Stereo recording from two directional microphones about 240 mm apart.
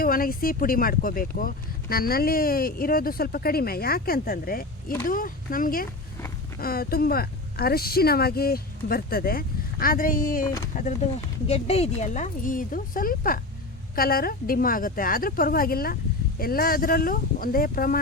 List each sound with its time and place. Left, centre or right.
0.0 s speech: left